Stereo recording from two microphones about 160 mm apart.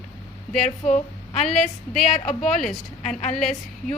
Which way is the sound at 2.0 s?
45° left (ahead or behind).